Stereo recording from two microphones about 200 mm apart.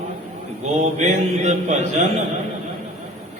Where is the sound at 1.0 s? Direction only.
35° right (ahead or behind).